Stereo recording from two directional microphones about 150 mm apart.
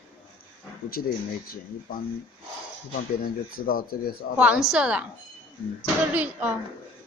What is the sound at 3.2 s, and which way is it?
Speech, 75° left (ahead or behind).